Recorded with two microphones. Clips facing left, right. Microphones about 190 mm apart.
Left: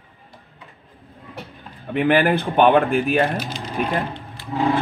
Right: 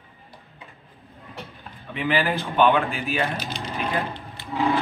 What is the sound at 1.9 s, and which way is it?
A man's voice, 60° left (ahead or behind).